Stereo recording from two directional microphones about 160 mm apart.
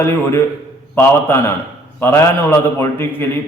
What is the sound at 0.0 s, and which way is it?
Speech, 15° left (ahead or behind).